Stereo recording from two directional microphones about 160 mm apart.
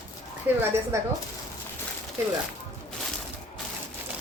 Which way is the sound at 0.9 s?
20° right (ahead or behind).